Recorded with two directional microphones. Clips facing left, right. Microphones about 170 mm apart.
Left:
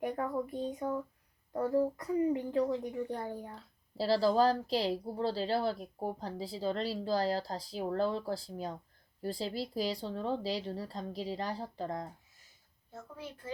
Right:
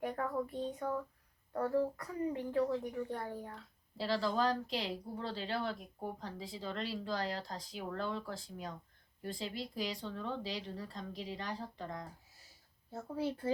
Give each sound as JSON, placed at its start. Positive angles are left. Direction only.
{"t": 0.2, "sound": "speech", "side_deg": 20}
{"t": 3.5, "sound": "speech", "side_deg": 35}
{"t": 12.9, "sound": "a woman's voice", "side_deg": -35}